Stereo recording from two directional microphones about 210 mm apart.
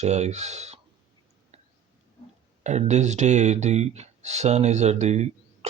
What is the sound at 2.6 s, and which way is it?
Speech, 35° right (ahead or behind).